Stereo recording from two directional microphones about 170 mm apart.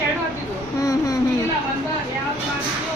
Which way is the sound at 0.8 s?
20° left (ahead or behind).